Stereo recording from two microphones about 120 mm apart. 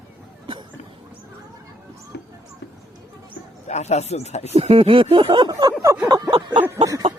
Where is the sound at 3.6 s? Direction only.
70° left (ahead or behind).